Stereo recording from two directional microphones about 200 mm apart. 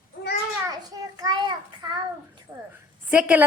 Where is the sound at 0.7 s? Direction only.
20° right (ahead or behind).